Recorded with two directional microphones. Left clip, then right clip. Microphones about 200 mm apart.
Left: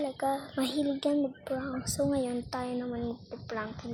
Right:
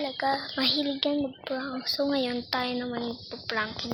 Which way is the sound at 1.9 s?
5° left (ahead or behind).